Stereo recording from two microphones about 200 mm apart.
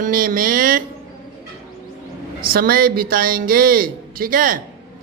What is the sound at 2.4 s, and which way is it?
Speech, 45° right (ahead or behind).